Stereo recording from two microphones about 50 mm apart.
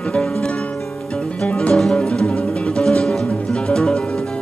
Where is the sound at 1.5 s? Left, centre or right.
Left.